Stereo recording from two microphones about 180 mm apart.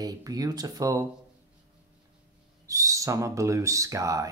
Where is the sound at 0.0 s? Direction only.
20° right (ahead or behind).